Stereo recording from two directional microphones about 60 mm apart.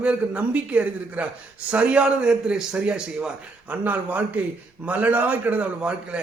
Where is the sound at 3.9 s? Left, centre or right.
Right.